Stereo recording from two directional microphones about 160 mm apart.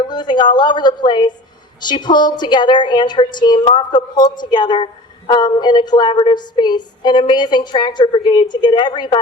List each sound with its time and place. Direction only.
0.1 s a woman's voice: 30° left (ahead or behind)